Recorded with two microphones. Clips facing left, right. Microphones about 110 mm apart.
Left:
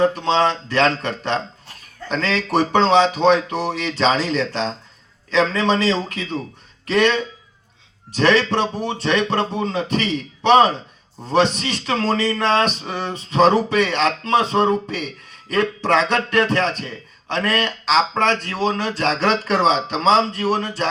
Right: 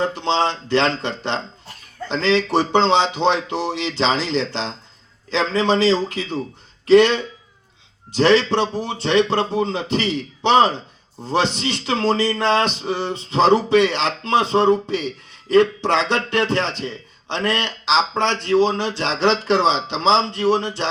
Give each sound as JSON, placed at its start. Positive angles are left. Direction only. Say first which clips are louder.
{"t": 0.0, "sound": "speech", "louder": "left 3 dB", "side_deg": -25}